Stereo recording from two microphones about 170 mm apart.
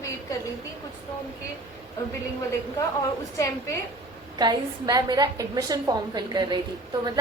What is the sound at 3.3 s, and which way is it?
Speech, 20° left (ahead or behind).